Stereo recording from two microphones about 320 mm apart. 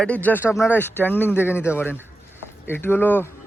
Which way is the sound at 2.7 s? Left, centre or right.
Centre.